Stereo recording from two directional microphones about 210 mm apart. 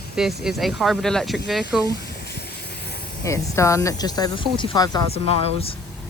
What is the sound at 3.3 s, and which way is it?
Speech, 15° left (ahead or behind).